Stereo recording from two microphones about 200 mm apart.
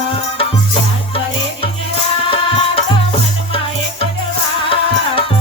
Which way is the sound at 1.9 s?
30° left (ahead or behind).